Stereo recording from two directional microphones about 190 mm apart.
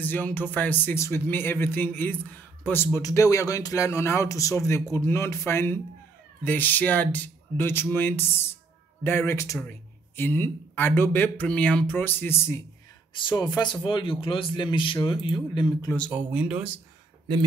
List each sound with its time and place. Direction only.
0.0 s speech: 10° left (ahead or behind)
13.1 s a man's voice: 25° left (ahead or behind)
16.1 s speech: 10° right (ahead or behind)